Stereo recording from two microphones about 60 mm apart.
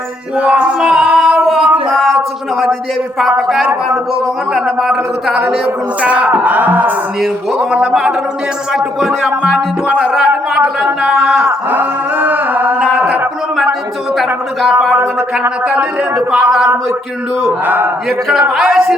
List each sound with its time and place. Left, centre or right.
0.3 s speech: centre
0.9 s singing: right
1.2 s a sound: centre
3.2 s speech: centre
6.0 s speech: right
7.2 s speech: centre
10.0 s speech: centre
11.7 s a sound: right
14.2 s speech: centre
14.9 s speech: right
17.7 s speech: right
18.5 s speech: centre